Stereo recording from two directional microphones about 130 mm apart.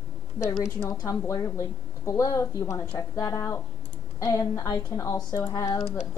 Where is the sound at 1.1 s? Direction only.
25° left (ahead or behind).